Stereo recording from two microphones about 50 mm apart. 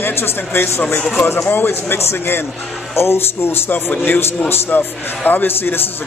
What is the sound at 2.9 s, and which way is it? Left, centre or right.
Speech, left.